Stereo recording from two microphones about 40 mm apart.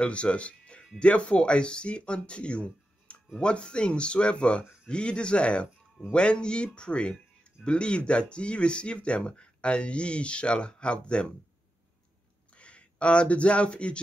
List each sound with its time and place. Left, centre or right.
0.0 s speech: left
12.5 s speech: left